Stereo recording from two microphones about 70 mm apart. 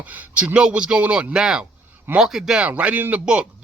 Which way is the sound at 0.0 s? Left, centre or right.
Right.